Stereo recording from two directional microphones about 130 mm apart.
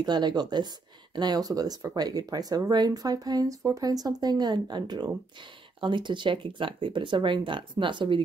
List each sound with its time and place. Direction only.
0.0 s speech: 35° right (ahead or behind)